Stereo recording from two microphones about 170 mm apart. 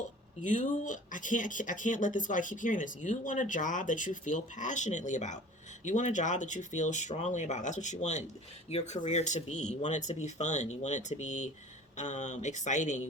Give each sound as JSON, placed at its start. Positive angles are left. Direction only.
{"t": 0.4, "sound": "speech", "side_deg": 50}